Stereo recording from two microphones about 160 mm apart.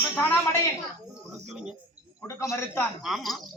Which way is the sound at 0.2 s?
15° left (ahead or behind).